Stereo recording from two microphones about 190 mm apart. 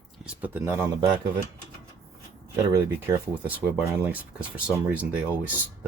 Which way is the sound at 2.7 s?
15° right (ahead or behind).